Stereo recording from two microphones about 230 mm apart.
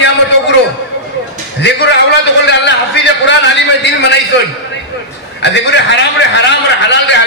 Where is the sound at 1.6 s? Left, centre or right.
Left.